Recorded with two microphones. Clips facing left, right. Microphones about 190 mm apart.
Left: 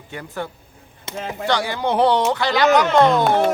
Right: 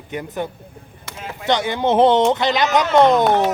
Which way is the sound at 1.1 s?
20° left (ahead or behind).